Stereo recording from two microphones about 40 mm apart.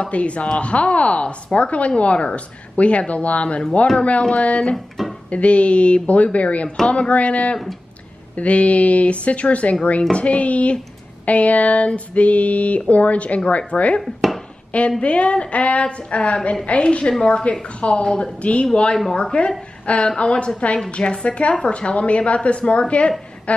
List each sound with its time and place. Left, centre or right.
0.0 s a woman's voice: left
5.0 s music: centre
5.3 s a woman's voice: left
14.0 s chopping: centre
15.0 s a woman's voice: left